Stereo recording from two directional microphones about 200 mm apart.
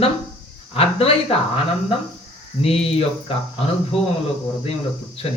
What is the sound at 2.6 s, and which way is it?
Speech, 30° left (ahead or behind).